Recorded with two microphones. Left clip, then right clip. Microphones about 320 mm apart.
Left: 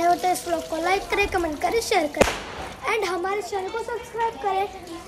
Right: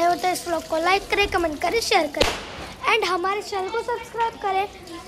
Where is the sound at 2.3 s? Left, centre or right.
Centre.